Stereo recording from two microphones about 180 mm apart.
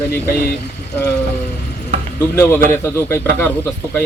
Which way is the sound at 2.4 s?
15° left (ahead or behind).